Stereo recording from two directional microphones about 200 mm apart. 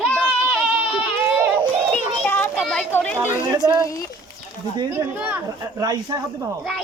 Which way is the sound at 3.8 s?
15° left (ahead or behind).